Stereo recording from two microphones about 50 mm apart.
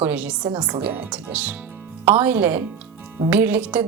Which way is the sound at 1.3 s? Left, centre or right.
Right.